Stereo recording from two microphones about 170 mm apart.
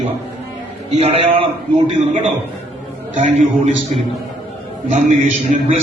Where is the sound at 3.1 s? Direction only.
50° right (ahead or behind).